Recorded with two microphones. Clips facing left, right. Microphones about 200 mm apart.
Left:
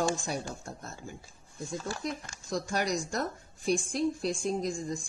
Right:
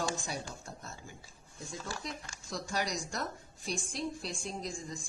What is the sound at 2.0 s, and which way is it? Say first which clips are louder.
Speech: left 7 dB; 50° left (ahead or behind).